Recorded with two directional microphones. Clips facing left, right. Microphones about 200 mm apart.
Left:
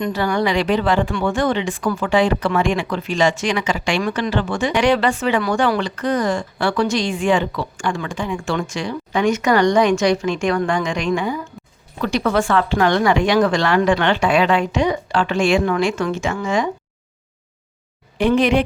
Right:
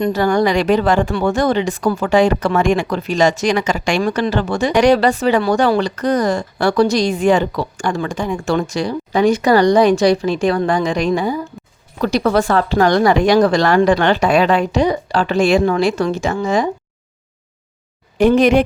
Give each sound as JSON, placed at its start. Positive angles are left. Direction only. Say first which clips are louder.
{"t": 0.0, "sound": "a woman's voice", "louder": "right 5 dB", "side_deg": -45}
{"t": 18.2, "sound": "speech", "louder": "right 4 dB", "side_deg": -45}